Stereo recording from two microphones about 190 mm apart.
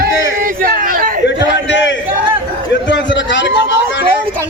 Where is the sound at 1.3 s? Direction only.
70° left (ahead or behind).